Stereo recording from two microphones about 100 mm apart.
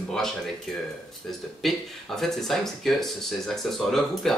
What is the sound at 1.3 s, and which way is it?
Speech, 5° left (ahead or behind).